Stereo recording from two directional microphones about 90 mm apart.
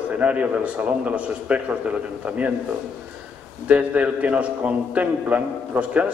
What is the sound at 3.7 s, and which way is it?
A man's voice, 15° right (ahead or behind).